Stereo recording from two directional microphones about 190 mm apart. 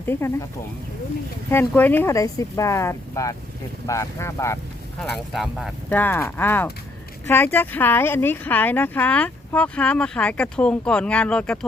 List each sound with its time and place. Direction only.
0.0 s a woman's voice: 10° left (ahead or behind)
1.5 s a woman's voice: 10° left (ahead or behind)
4.9 s speech: centre (ahead or behind)
5.9 s a woman's voice: 10° left (ahead or behind)